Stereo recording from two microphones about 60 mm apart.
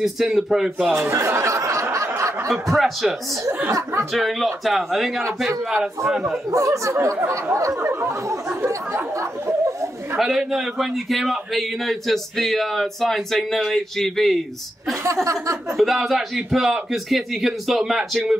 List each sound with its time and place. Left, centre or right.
0.0 s a man's voice: centre
1.1 s a sound: right
2.1 s snicker: right
2.4 s a man's voice: centre
3.7 s speech: right
4.1 s a man's voice: centre
6.5 s speech: right
7.8 s speech: right
10.1 s a man's voice: centre
15.7 s a man's voice: centre